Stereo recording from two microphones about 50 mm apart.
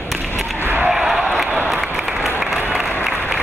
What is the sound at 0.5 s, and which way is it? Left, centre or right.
Skateboard, right.